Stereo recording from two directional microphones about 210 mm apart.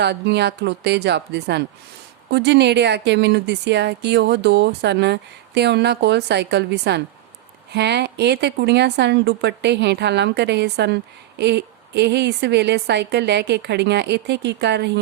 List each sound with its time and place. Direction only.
0.0 s a woman's voice: 55° right (ahead or behind)